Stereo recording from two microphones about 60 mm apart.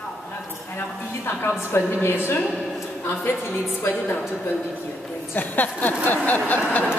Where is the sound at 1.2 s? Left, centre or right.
Left.